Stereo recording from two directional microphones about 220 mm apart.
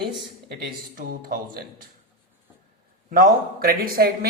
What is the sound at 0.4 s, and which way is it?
Speech, 45° right (ahead or behind).